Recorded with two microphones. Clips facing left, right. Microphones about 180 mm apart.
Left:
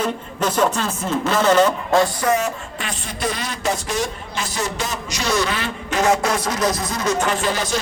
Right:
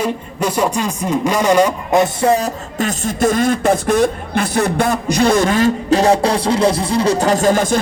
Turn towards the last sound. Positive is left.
turn(degrees=-50)  # may be behind; listen again after turning